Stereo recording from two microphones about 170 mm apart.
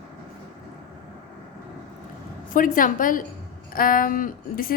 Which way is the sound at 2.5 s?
55° left (ahead or behind).